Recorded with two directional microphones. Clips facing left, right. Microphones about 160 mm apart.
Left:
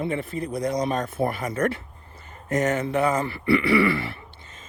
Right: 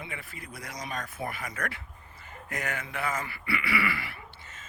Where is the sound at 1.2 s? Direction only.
35° left (ahead or behind).